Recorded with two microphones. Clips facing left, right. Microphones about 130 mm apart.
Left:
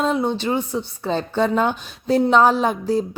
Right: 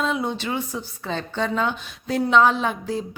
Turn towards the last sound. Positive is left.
turn(degrees=35)  # may be behind; listen again after turning